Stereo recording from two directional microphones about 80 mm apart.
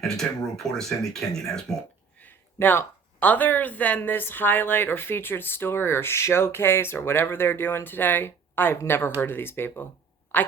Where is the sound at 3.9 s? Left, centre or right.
Left.